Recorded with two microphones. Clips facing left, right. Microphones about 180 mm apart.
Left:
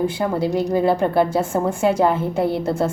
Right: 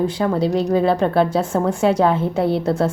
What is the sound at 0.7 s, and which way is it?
Speech, 5° left (ahead or behind).